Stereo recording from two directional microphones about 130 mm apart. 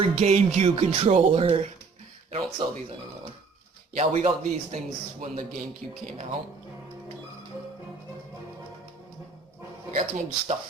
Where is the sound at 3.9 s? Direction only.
60° right (ahead or behind).